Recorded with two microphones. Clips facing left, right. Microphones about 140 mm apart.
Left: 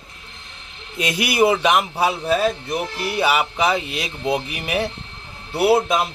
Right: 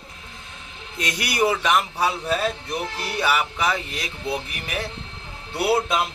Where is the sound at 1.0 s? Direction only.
15° left (ahead or behind).